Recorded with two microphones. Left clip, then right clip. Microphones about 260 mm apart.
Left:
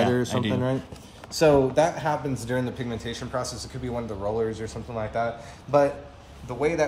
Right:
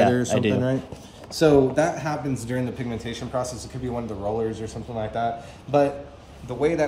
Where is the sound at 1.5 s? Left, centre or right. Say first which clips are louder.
Right 1 dB; left.